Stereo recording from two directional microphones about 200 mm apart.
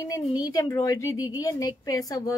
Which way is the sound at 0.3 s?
20° left (ahead or behind).